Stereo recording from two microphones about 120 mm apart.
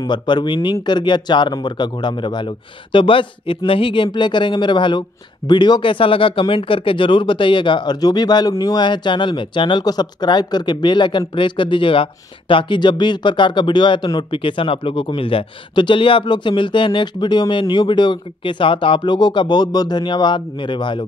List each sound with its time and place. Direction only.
0.0 s speech: 40° left (ahead or behind)